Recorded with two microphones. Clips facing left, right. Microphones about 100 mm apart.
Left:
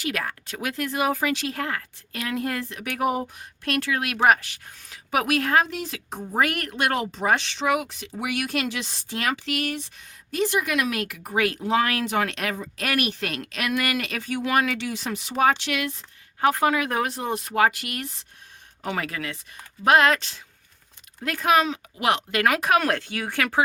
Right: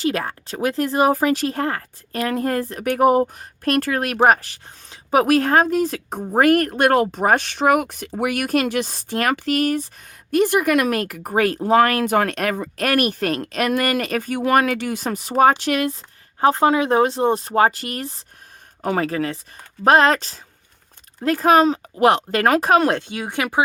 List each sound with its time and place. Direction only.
0.0 s speech: 30° right (ahead or behind)